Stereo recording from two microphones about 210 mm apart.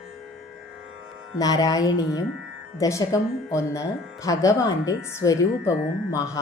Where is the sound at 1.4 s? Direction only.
15° left (ahead or behind).